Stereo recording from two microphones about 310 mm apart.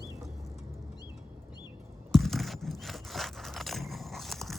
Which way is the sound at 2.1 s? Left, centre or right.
Centre.